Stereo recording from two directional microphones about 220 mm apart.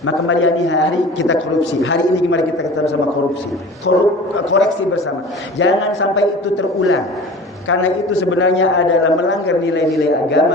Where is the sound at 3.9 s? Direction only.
60° left (ahead or behind).